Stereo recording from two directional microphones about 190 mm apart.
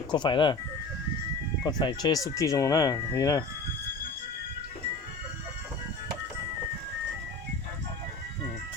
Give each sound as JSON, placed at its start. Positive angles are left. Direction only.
{"t": 0.1, "sound": "speech", "side_deg": 25}
{"t": 1.6, "sound": "speech", "side_deg": 25}